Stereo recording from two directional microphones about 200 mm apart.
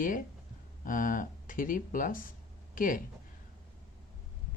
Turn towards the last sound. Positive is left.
turn(degrees=45)  # may be behind; listen again after turning